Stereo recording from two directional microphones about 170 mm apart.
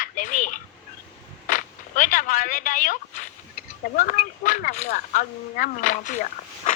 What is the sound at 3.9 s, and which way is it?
Speech, 50° left (ahead or behind).